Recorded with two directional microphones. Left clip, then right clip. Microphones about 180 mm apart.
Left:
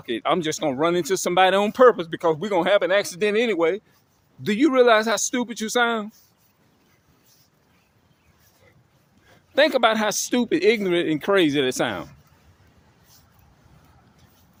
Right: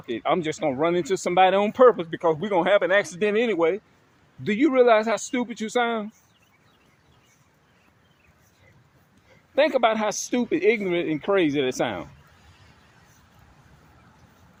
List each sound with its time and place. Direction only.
0.0 s speech: 40° left (ahead or behind)
9.6 s speech: 30° left (ahead or behind)